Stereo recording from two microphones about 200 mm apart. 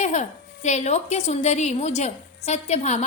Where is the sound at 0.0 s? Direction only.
35° left (ahead or behind).